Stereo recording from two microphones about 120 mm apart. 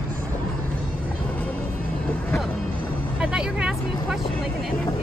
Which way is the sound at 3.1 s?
10° right (ahead or behind).